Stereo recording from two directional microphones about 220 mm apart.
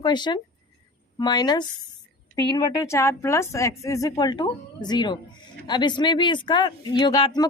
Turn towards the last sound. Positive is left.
turn(degrees=20)  # may be behind; listen again after turning